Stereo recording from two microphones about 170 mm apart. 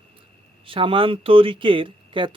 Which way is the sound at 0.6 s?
30° right (ahead or behind).